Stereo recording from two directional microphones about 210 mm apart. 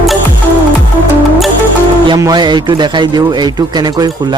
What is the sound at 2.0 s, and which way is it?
Speech, 20° right (ahead or behind).